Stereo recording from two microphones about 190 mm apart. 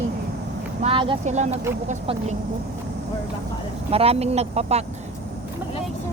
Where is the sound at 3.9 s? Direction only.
30° right (ahead or behind).